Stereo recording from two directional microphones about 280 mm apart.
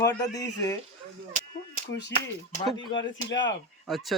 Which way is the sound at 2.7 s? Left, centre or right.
Centre.